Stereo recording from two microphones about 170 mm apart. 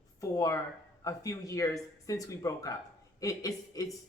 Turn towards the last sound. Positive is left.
turn(degrees=20)  # may be behind; listen again after turning